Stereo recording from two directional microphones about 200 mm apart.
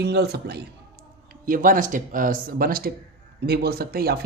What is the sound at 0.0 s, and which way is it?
Speech, 55° right (ahead or behind).